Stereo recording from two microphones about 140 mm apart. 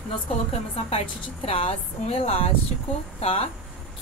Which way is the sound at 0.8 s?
50° left (ahead or behind).